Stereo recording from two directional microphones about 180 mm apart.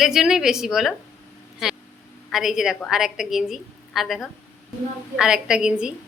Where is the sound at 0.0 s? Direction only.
Centre (ahead or behind).